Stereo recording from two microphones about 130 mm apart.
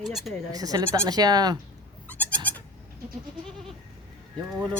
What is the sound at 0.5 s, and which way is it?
Sheep, 30° right (ahead or behind).